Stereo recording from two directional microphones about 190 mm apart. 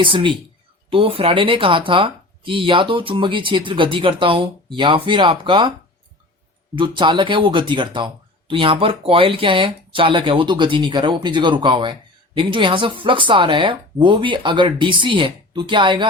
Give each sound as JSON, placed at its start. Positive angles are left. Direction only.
{"t": 0.0, "sound": "speech", "side_deg": -25}
{"t": 6.7, "sound": "speech", "side_deg": -25}